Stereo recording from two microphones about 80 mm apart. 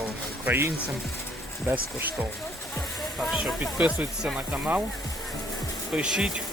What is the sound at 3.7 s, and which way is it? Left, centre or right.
Speech, centre.